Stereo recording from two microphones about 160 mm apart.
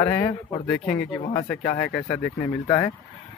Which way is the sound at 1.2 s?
40° left (ahead or behind).